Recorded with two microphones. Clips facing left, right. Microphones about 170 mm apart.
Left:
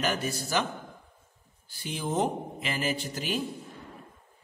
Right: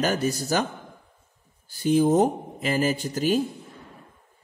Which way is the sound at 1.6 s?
45° right (ahead or behind).